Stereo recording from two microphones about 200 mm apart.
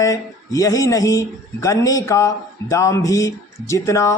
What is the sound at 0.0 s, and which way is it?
Speech, 15° left (ahead or behind).